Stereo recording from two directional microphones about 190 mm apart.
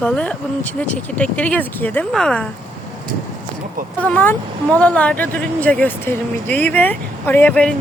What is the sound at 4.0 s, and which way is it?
Speech, 10° left (ahead or behind).